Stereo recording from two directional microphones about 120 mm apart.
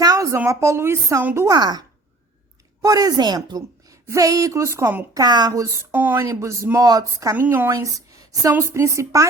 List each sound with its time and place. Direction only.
0.0 s a woman's voice: 30° right (ahead or behind)
1.5 s speech: 35° right (ahead or behind)
2.8 s a woman's voice: 30° right (ahead or behind)
5.1 s speech: 35° right (ahead or behind)
7.3 s a woman's voice: 15° right (ahead or behind)
7.7 s speech: 25° right (ahead or behind)